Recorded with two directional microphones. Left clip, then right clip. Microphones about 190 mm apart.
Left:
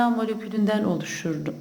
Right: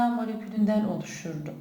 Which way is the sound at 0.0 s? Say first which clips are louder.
Left 4 dB; 45° left (ahead or behind).